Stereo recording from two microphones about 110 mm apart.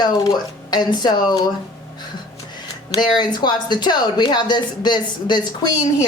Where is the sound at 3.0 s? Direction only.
40° left (ahead or behind).